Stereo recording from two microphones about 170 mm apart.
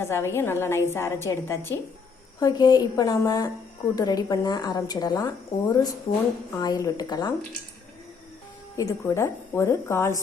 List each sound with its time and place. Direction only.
0.0 s a woman's voice: 15° left (ahead or behind)
8.7 s a woman's voice: 20° left (ahead or behind)